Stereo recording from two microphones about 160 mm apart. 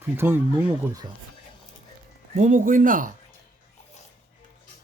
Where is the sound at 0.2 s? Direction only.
10° right (ahead or behind).